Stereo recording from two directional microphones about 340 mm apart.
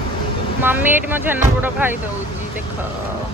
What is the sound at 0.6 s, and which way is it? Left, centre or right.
Speech, centre.